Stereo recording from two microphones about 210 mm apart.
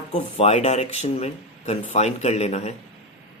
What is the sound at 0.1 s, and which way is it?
Speech, 30° left (ahead or behind).